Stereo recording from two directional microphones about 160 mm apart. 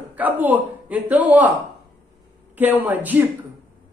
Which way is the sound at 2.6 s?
10° right (ahead or behind).